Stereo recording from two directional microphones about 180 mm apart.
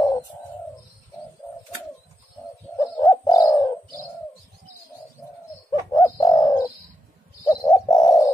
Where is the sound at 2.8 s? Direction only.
20° left (ahead or behind).